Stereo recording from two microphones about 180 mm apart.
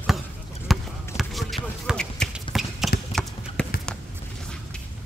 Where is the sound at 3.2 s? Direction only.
5° left (ahead or behind).